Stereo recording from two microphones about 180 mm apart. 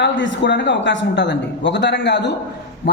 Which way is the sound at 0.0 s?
80° left.